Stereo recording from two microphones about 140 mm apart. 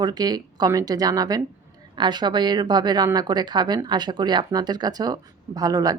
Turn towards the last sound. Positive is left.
turn(degrees=-25)  # may be behind; listen again after turning